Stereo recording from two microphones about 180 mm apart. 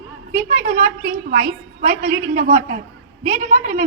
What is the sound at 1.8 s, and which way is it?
A woman's voice, 40° right (ahead or behind).